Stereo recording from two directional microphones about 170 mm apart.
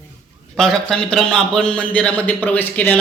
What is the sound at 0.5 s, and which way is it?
A man's voice, 5° left (ahead or behind).